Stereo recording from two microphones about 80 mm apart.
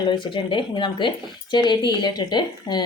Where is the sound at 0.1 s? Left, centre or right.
Left.